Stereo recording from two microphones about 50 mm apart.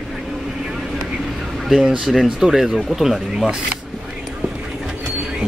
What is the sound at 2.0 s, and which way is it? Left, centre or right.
Speech, centre.